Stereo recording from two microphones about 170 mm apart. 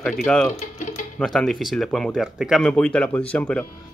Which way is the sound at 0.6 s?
45° left (ahead or behind).